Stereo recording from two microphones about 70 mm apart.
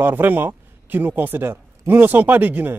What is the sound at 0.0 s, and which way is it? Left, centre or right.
Speech, right.